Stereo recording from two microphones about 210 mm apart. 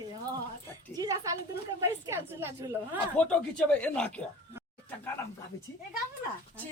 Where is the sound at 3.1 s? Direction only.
5° left (ahead or behind).